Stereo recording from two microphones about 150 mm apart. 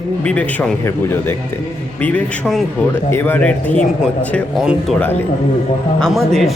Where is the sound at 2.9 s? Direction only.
15° left (ahead or behind).